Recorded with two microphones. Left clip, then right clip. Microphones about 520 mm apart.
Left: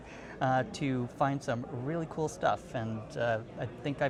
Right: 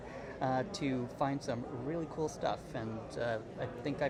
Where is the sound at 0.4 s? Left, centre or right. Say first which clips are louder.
Left 5 dB; left.